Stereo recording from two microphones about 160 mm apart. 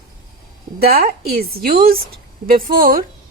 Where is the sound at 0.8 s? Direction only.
70° right (ahead or behind).